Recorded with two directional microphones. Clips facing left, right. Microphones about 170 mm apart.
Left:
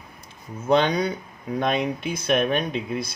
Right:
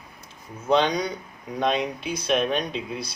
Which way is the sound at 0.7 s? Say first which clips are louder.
Left 1 dB; 55° left (ahead or behind).